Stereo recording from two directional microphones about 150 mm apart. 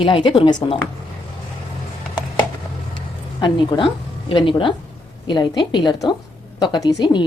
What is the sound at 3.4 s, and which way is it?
A woman's voice, 30° left (ahead or behind).